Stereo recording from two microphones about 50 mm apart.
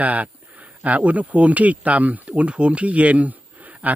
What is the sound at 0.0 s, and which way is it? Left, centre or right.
Speech, right.